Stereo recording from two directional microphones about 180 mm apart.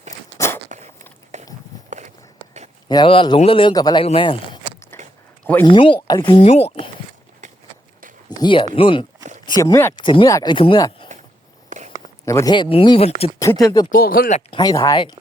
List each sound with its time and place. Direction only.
0.3 s biting: 15° left (ahead or behind)
1.3 s walk: 40° right (ahead or behind)
2.9 s a man's voice: 25° left (ahead or behind)
4.9 s a sound: 10° left (ahead or behind)
5.6 s speech: 30° left (ahead or behind)
6.3 s speech: 35° left (ahead or behind)
7.4 s a sound: 45° right (ahead or behind)
8.4 s speech: 25° left (ahead or behind)
9.5 s speech: 20° left (ahead or behind)
11.7 s a sound: 45° right (ahead or behind)
12.2 s speech: 15° left (ahead or behind); by 13.3 s 35° left (ahead or behind)
13.4 s speech: 20° left (ahead or behind)
13.9 s speech: 55° left (ahead or behind)
14.5 s speech: 20° left (ahead or behind)